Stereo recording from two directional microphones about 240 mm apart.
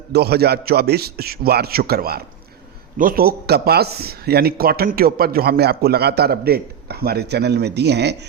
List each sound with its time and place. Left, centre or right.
0.1 s a man's voice: right